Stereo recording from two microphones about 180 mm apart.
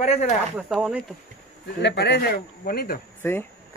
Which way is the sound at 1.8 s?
70° left (ahead or behind).